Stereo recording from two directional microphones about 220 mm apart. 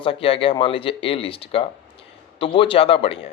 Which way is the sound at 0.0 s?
25° left (ahead or behind).